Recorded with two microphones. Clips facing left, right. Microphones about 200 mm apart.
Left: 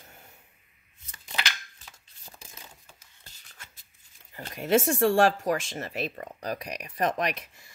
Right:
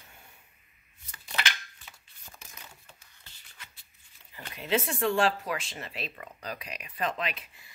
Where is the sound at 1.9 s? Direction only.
35° left (ahead or behind).